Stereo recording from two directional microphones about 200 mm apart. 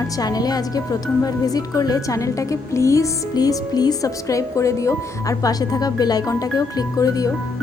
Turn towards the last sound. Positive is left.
turn(degrees=15)  # may be behind; listen again after turning